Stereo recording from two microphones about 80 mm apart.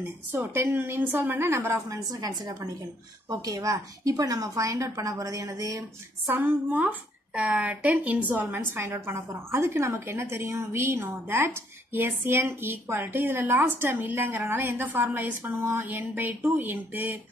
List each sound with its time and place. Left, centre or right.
0.3 s a woman's voice: right
2.1 s a woman's voice: right
6.2 s a woman's voice: right
8.5 s a woman's voice: right